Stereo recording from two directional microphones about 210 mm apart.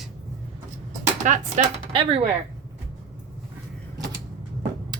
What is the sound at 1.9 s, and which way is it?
Speech, 25° right (ahead or behind).